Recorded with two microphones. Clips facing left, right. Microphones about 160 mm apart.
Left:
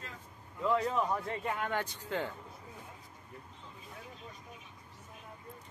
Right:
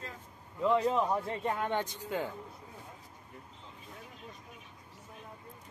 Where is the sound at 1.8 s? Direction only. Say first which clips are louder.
Right 1 dB; 15° right (ahead or behind).